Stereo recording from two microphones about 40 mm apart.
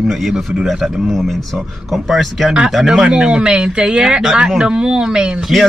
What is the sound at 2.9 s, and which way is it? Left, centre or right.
Speech, right.